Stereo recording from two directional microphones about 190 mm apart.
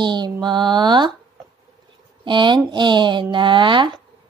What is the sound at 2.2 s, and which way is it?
Speech, 25° right (ahead or behind).